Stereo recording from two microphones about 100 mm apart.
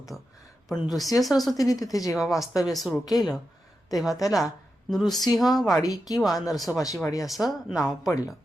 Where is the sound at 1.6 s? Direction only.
35° left (ahead or behind).